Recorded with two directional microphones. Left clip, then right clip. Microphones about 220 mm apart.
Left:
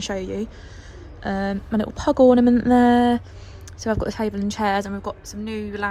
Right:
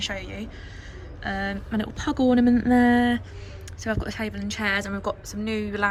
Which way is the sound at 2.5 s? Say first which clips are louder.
Left 4 dB; 35° right (ahead or behind).